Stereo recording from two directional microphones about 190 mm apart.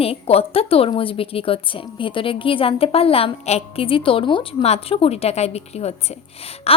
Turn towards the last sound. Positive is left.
turn(degrees=30)  # may be behind; listen again after turning